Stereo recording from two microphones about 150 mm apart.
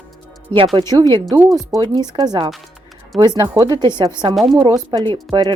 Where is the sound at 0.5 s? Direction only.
35° right (ahead or behind).